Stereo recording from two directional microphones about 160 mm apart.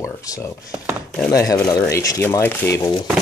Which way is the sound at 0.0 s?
20° left (ahead or behind).